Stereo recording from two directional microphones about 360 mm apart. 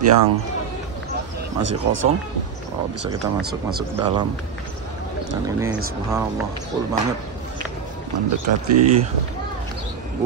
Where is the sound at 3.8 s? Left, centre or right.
Centre.